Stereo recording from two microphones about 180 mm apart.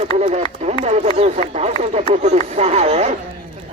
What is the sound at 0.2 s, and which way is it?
Speech, 40° right (ahead or behind).